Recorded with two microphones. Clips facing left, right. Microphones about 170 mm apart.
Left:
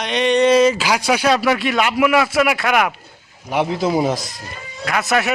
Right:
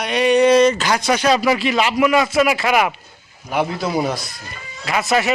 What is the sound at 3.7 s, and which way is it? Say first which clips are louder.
Speech: left 3 dB; 25° left (ahead or behind).